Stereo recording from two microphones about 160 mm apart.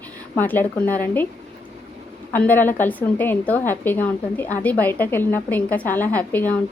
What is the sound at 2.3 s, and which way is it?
A woman's voice, 10° left (ahead or behind).